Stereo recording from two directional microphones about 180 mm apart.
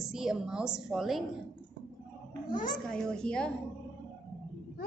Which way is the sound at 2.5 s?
50° left (ahead or behind).